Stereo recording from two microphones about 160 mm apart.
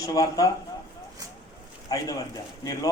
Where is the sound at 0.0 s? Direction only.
20° left (ahead or behind).